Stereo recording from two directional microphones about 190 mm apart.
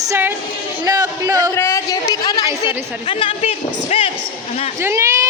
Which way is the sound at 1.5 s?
15° left (ahead or behind).